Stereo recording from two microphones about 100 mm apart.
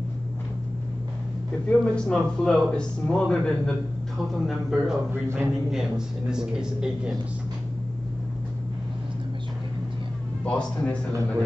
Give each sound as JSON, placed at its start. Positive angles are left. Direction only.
{"t": 1.7, "sound": "a man's voice", "side_deg": 5}
{"t": 5.1, "sound": "speech", "side_deg": -20}
{"t": 5.7, "sound": "speech", "side_deg": -5}
{"t": 10.4, "sound": "speech", "side_deg": 10}